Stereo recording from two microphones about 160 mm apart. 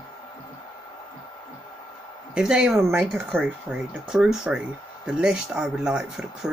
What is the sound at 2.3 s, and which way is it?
Speech, 5° right (ahead or behind).